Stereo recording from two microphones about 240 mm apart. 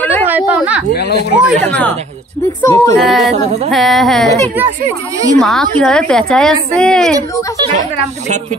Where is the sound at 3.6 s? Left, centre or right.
Centre.